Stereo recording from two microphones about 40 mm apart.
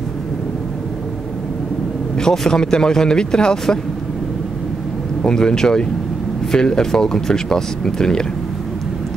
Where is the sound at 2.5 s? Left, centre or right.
Centre.